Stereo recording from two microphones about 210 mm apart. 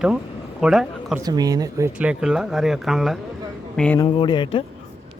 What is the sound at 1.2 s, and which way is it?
Speech, 15° right (ahead or behind).